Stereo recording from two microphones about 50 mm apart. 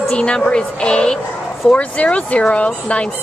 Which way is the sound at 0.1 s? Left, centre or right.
Centre.